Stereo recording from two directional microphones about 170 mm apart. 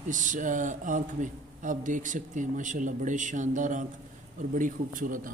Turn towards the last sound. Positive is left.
turn(degrees=-50)  # may be behind; listen again after turning